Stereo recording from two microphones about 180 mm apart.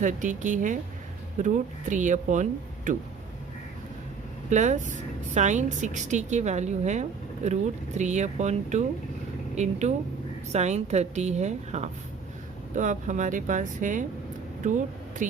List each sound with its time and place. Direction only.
0.0 s speech: 45° right (ahead or behind)
4.4 s a woman's voice: 40° right (ahead or behind)
15.2 s speech: 45° right (ahead or behind)